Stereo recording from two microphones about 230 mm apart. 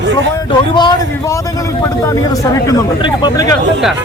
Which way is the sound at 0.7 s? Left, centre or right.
Centre.